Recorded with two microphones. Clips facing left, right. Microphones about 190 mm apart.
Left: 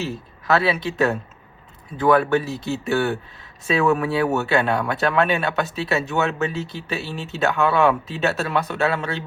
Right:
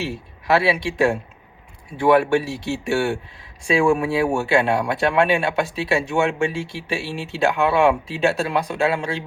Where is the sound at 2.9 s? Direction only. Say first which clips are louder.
Even; 30° right (ahead or behind).